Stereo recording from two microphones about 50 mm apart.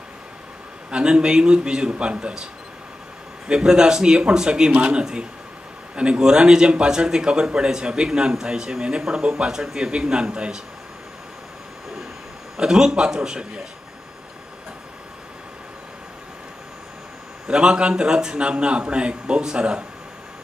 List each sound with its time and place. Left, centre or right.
0.8 s speech: centre
3.4 s speech: centre
12.5 s speech: centre
17.5 s speech: centre